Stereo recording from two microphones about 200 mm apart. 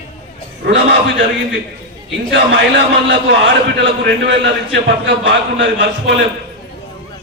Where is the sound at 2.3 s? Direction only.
60° right (ahead or behind).